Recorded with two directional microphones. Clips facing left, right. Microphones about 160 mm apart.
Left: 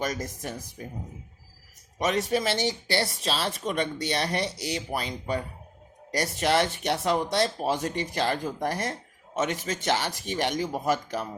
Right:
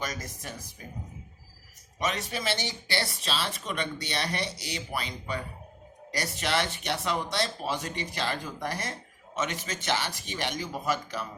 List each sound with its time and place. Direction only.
0.0 s speech: 50° left (ahead or behind)
2.0 s speech: 45° left (ahead or behind)